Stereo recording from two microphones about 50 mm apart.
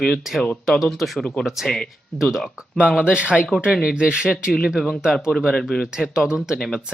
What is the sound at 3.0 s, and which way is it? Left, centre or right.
Speech, right.